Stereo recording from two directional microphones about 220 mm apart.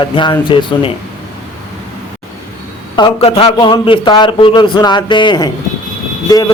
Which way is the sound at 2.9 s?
25° left (ahead or behind).